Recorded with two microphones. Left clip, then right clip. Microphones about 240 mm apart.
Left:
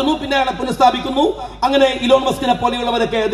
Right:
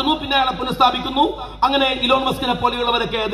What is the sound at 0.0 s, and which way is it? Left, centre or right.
A man's voice, left.